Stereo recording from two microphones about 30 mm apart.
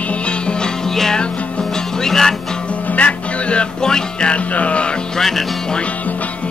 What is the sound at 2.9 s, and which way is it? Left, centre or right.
Music, left.